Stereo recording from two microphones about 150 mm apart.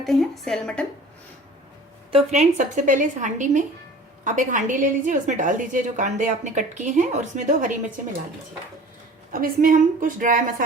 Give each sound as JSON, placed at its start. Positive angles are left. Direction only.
{"t": 0.0, "sound": "speech", "side_deg": 0}
{"t": 2.1, "sound": "a woman's voice", "side_deg": -50}
{"t": 9.3, "sound": "a woman's voice", "side_deg": -70}